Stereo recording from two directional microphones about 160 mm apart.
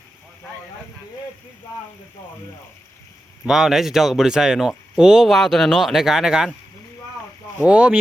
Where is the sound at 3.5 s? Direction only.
5° right (ahead or behind).